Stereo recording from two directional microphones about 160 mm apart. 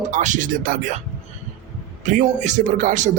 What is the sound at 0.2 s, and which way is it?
Speech, 55° right (ahead or behind).